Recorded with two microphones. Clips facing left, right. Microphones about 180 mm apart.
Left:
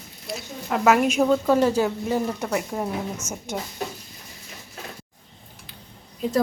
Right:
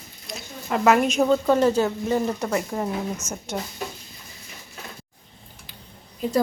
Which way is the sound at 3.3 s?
50° left (ahead or behind).